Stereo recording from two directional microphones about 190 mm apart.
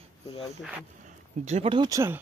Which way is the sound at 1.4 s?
35° right (ahead or behind).